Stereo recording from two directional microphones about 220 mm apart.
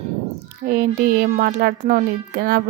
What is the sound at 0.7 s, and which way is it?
A woman's voice, 40° right (ahead or behind).